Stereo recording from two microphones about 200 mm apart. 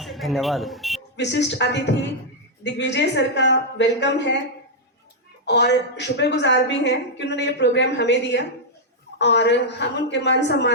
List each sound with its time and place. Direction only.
0.0 s speech: centre (ahead or behind)
1.1 s a woman's voice: 60° left (ahead or behind)
5.5 s a woman's voice: 60° left (ahead or behind)